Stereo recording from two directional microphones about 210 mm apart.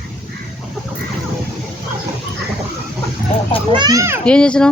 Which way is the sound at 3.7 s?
15° right (ahead or behind).